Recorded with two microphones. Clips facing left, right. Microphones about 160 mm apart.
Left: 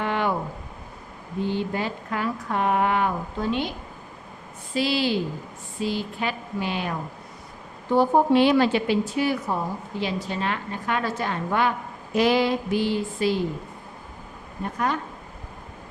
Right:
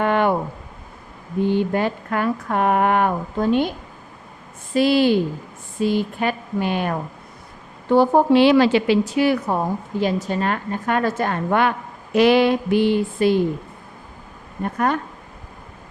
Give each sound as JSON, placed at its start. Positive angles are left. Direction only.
{"t": 0.0, "sound": "a sound", "side_deg": -55}
{"t": 1.5, "sound": "speech", "side_deg": -55}
{"t": 4.7, "sound": "speech", "side_deg": -50}
{"t": 7.9, "sound": "a woman's voice", "side_deg": -85}
{"t": 10.0, "sound": "speech", "side_deg": -45}
{"t": 12.1, "sound": "a sound", "side_deg": -70}
{"t": 14.6, "sound": "speech", "side_deg": -55}